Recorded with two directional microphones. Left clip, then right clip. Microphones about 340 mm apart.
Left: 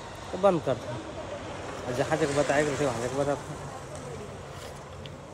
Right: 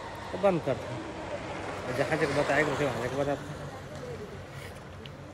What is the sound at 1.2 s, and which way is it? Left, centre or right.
Vehicle, right.